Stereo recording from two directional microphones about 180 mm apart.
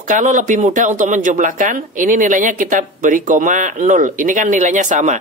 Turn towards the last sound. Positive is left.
turn(degrees=-45)  # may be behind; listen again after turning